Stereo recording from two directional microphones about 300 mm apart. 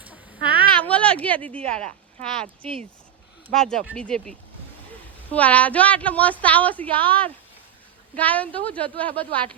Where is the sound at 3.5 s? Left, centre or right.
Centre.